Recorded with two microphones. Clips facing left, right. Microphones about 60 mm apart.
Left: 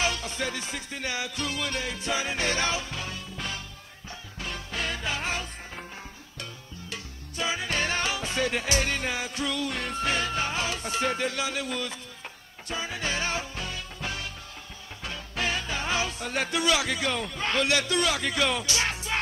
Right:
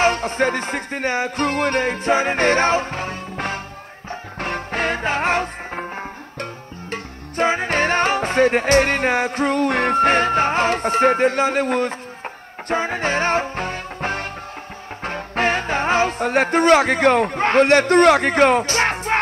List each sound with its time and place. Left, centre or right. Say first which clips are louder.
0.0 s music: right 11 dB; right